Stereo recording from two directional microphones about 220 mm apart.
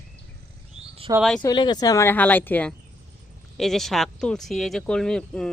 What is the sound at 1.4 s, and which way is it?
Speech, 20° left (ahead or behind).